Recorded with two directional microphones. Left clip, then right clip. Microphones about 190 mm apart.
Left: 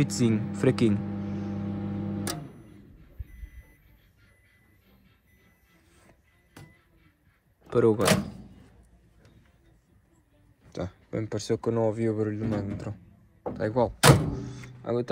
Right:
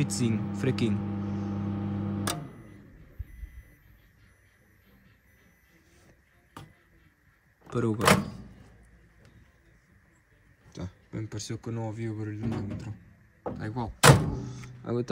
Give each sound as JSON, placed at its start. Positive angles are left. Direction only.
{"t": 0.0, "sound": "music", "side_deg": -5}
{"t": 7.7, "sound": "speech", "side_deg": -15}
{"t": 10.7, "sound": "speech", "side_deg": -10}
{"t": 14.3, "sound": "thunk", "side_deg": -35}